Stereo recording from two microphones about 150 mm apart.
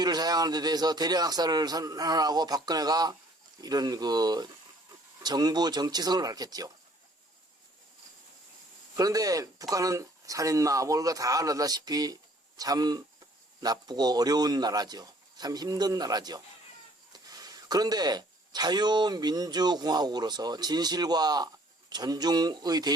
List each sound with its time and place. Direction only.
0.0 s speech: 25° right (ahead or behind)
9.0 s speech: 25° right (ahead or behind)